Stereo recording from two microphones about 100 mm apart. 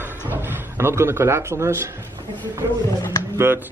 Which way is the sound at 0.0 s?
20° right (ahead or behind).